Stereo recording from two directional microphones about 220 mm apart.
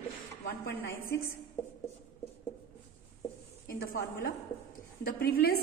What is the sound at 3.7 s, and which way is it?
A woman's voice, 40° left (ahead or behind).